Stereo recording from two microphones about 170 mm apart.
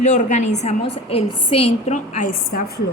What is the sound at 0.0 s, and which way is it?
A woman's voice, 45° left (ahead or behind).